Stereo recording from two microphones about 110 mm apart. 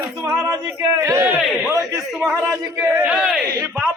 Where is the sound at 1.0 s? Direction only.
25° right (ahead or behind).